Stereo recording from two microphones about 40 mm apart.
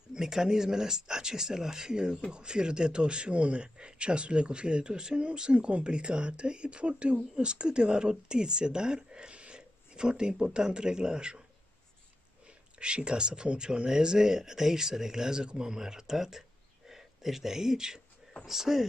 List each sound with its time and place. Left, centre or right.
0.1 s speech: centre
5.5 s speech: right
12.7 s speech: right; by 18.9 s centre